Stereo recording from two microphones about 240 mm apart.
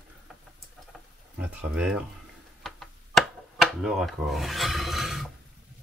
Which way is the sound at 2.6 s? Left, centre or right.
Centre.